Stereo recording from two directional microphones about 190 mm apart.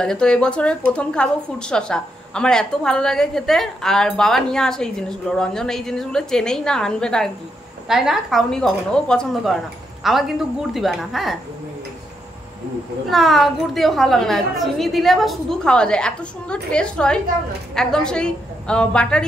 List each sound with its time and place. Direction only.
0.0 s a woman's voice: 5° left (ahead or behind)
13.1 s a woman's voice: centre (ahead or behind)